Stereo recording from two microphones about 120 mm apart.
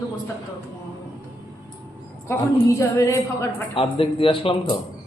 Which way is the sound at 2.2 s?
25° left (ahead or behind).